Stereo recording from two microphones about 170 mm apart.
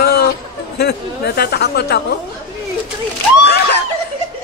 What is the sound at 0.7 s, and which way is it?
Speech, 65° left (ahead or behind).